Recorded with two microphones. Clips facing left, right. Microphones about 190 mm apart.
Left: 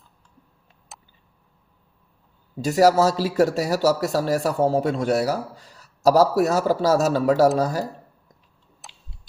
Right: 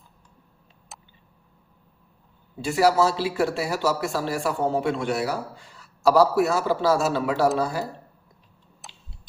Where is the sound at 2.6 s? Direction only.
40° left (ahead or behind).